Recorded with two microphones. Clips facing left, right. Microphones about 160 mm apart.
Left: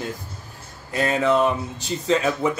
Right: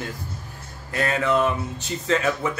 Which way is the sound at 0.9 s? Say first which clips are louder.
Left 2 dB; 20° left (ahead or behind).